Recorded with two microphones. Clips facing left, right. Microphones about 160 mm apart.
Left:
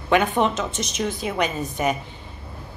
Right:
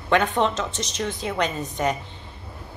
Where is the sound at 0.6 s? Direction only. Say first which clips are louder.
Left 2 dB; 80° right.